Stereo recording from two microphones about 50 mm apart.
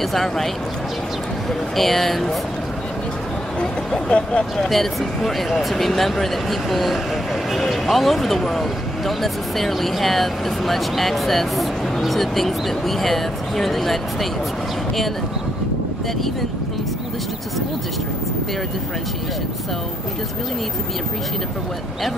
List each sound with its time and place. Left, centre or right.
0.1 s speech: centre
1.8 s speech: centre
4.1 s speech: left
4.6 s speech: centre